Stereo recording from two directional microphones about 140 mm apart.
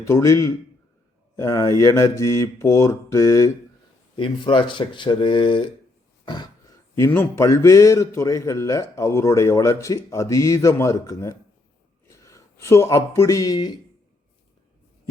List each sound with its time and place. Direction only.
0.0 s a man's voice: 20° left (ahead or behind)
4.2 s speech: 35° left (ahead or behind)
6.2 s a sound: 30° left (ahead or behind)
6.9 s a man's voice: 15° left (ahead or behind)